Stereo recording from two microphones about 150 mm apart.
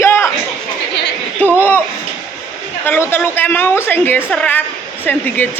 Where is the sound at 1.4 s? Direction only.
15° left (ahead or behind).